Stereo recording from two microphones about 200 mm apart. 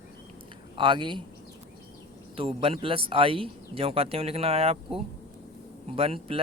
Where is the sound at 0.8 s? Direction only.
25° right (ahead or behind).